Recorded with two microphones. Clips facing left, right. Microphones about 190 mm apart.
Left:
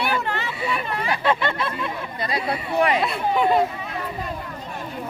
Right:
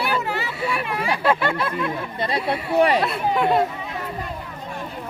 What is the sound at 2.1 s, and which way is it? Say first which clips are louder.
Speech: right 2 dB; 30° right (ahead or behind).